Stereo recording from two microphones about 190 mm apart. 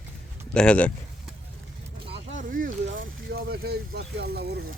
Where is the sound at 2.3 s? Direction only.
50° right (ahead or behind).